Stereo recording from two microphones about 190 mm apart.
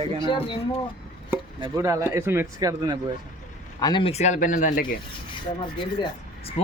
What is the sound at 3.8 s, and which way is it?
Speech, 20° left (ahead or behind).